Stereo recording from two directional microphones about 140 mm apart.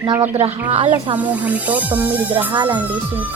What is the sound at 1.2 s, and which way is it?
Speech, 10° right (ahead or behind).